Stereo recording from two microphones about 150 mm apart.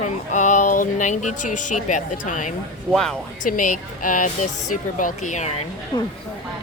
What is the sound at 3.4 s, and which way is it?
Speech, 60° left (ahead or behind).